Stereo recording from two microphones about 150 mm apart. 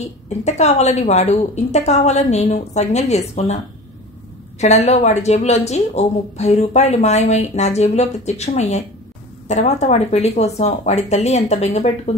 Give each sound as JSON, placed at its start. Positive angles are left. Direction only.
{"t": 0.3, "sound": "speech", "side_deg": 50}
{"t": 4.6, "sound": "speech", "side_deg": 50}